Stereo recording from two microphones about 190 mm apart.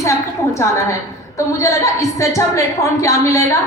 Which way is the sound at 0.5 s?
15° left (ahead or behind).